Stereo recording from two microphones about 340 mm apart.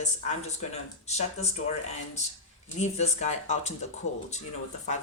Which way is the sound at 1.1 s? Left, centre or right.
Centre.